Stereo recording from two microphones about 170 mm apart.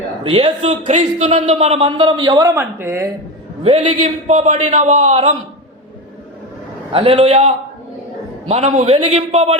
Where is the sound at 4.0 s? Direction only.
40° right (ahead or behind).